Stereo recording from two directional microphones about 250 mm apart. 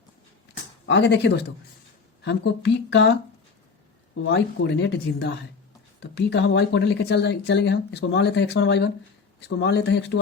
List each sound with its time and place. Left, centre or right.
0.9 s speech: left